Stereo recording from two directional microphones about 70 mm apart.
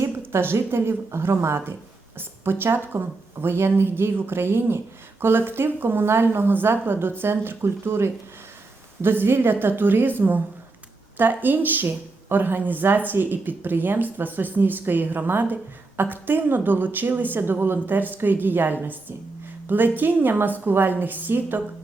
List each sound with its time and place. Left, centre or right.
0.0 s a woman's voice: right